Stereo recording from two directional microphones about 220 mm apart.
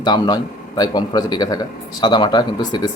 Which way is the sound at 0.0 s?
20° left (ahead or behind).